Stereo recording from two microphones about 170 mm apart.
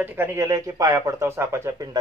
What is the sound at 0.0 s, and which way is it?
A man's voice, 15° right (ahead or behind).